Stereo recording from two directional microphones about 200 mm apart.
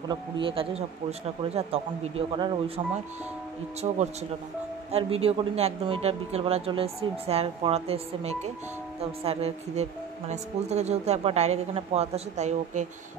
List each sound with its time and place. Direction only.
0.1 s speech: 25° right (ahead or behind)
3.8 s speech: 30° right (ahead or behind)